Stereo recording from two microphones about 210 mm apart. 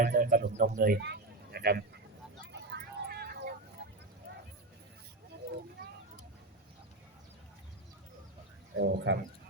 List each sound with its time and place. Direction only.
0.0 s speech: 40° right (ahead or behind)
2.5 s vehicle: 50° right (ahead or behind)
3.8 s a sound: 55° right (ahead or behind)
8.7 s speech: 55° right (ahead or behind)